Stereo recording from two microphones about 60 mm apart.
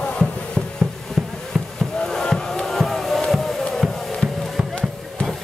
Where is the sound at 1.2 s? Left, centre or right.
Centre.